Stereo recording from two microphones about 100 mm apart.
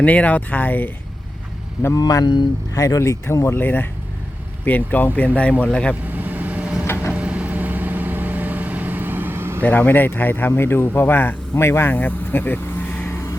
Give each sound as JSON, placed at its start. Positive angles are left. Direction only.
{"t": 0.0, "sound": "speech", "side_deg": 15}
{"t": 2.0, "sound": "speech", "side_deg": 40}
{"t": 2.7, "sound": "speech", "side_deg": 35}
{"t": 5.9, "sound": "vehicle", "side_deg": -15}
{"t": 6.8, "sound": "vehicle", "side_deg": 25}
{"t": 7.1, "sound": "vehicle", "side_deg": -10}
{"t": 9.6, "sound": "speech", "side_deg": 15}